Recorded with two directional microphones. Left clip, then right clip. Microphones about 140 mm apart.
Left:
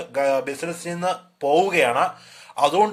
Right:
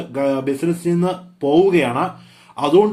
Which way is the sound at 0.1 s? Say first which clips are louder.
Right 1 dB; 35° left (ahead or behind).